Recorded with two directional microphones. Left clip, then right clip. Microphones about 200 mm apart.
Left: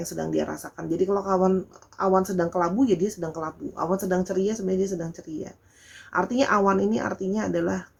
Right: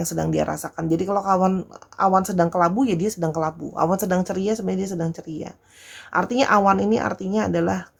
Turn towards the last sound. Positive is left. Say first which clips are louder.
# right 4 dB
turn(degrees=-35)  # may be behind; listen again after turning